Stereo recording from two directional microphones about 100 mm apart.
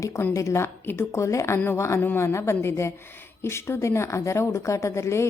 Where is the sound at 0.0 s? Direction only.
30° left (ahead or behind).